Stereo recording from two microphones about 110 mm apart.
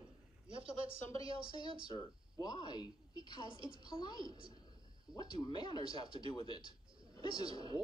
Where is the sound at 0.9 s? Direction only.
25° left (ahead or behind).